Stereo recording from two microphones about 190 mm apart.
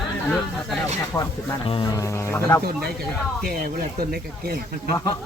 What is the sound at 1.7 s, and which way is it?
Speech, 25° left (ahead or behind).